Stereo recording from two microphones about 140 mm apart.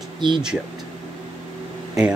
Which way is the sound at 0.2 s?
35° right (ahead or behind).